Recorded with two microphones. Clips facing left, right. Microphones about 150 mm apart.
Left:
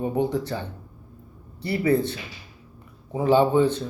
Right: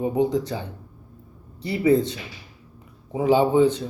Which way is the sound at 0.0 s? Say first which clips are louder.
Right 2 dB; 15° right (ahead or behind).